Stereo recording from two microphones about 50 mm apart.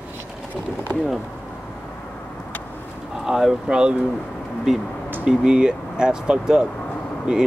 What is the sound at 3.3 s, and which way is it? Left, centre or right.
Speech, centre.